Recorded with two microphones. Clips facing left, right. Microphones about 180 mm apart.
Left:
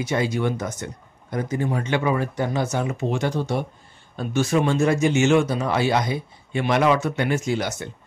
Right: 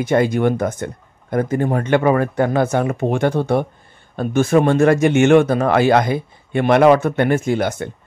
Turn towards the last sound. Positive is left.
turn(degrees=-55)  # may be behind; listen again after turning